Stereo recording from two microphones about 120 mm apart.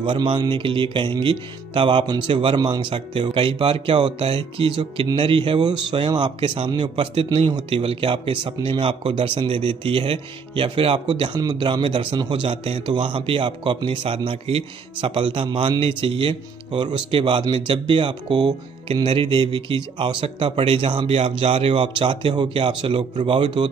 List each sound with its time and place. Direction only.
0.0 s speech: 40° right (ahead or behind)